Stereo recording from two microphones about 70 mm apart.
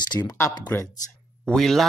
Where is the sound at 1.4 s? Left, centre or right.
Centre.